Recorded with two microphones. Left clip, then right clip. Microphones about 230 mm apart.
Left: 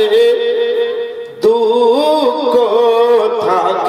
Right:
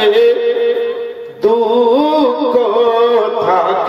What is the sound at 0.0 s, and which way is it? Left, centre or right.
Music, left.